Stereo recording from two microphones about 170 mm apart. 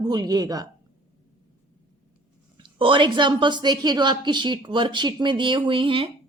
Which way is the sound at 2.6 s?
30° right (ahead or behind).